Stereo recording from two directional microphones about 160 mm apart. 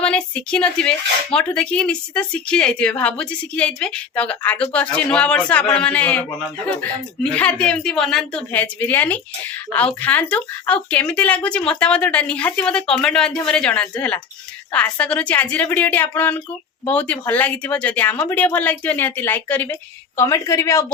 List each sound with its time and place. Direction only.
0.0 s speech: 10° left (ahead or behind)